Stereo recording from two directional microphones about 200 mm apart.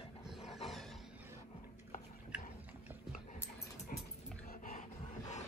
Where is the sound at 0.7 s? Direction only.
Centre (ahead or behind).